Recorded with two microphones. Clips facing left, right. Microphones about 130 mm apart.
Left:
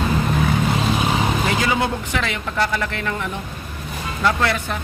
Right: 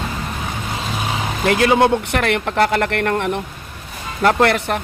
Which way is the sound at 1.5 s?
60° right (ahead or behind).